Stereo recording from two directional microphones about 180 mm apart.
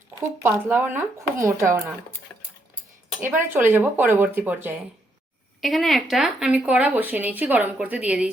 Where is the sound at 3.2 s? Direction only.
10° right (ahead or behind).